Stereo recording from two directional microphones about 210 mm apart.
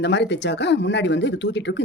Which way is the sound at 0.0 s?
55° left (ahead or behind).